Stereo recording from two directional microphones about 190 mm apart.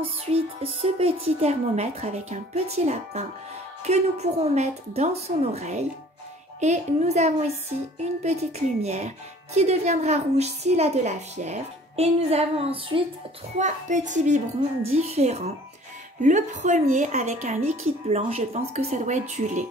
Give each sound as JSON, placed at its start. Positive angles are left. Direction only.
{"t": 0.0, "sound": "speech", "side_deg": -30}